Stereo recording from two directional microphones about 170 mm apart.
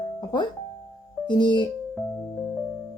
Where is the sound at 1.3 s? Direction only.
25° left (ahead or behind).